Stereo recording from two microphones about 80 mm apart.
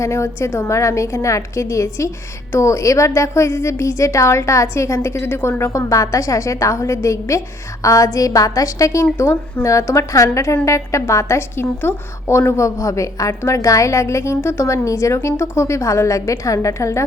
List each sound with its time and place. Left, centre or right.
0.0 s a woman's voice: left